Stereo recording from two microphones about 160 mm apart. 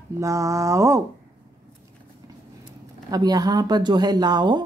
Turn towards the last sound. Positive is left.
turn(degrees=-25)  # may be behind; listen again after turning